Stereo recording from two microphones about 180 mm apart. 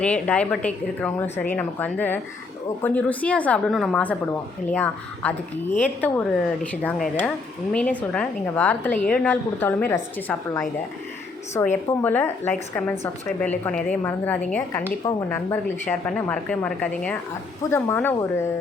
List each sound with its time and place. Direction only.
0.0 s speech: 5° left (ahead or behind)